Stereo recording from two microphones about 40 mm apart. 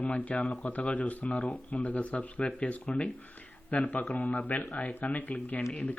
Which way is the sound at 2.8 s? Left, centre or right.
Left.